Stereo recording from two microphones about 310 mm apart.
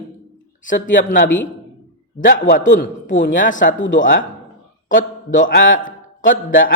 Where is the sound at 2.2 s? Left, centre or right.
Left.